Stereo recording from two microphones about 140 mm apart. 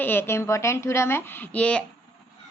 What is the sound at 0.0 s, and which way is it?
A woman's voice, 15° left (ahead or behind).